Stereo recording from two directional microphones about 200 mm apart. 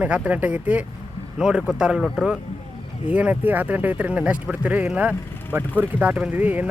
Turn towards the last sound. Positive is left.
turn(degrees=-5)  # may be behind; listen again after turning